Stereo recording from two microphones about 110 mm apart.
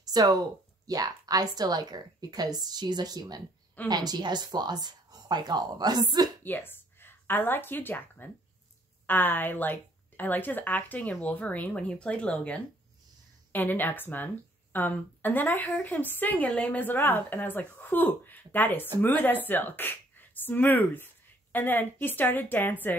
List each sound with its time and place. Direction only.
0.1 s a woman's voice: 35° right (ahead or behind)
6.4 s speech: 20° left (ahead or behind)